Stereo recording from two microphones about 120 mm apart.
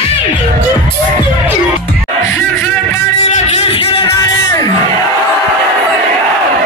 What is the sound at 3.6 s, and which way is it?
Music, 50° left (ahead or behind).